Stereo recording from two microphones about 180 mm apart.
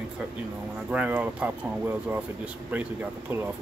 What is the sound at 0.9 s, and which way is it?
Speech, 10° right (ahead or behind).